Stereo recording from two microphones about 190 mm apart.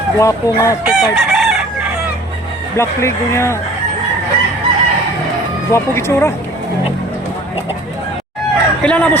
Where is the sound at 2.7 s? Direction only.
15° left (ahead or behind).